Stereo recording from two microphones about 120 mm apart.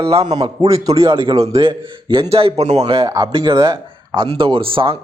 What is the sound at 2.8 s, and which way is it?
Speech, 45° right (ahead or behind).